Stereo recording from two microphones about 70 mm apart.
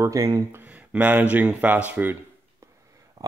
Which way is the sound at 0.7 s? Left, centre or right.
Centre.